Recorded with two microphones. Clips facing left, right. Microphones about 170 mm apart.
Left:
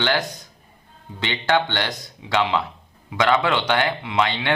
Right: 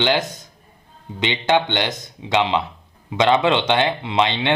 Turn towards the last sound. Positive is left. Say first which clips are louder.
# right 2 dB
turn(degrees=-20)  # may be behind; listen again after turning